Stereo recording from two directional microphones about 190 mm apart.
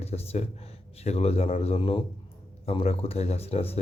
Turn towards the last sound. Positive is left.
turn(degrees=30)  # may be behind; listen again after turning